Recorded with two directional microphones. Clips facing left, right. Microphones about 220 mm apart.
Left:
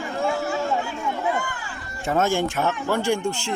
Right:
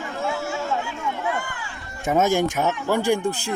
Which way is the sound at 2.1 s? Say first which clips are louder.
Right 2 dB; 15° right (ahead or behind).